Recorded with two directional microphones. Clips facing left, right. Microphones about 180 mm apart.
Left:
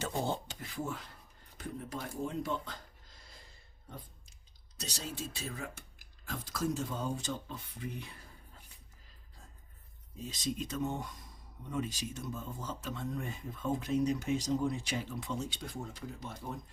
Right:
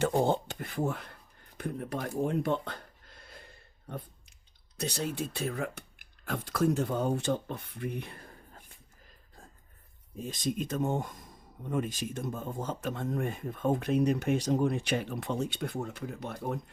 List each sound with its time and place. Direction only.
0.0 s speech: 55° right (ahead or behind)
1.5 s a sound: 60° right (ahead or behind)
4.8 s speech: 60° right (ahead or behind)
10.2 s speech: 50° right (ahead or behind)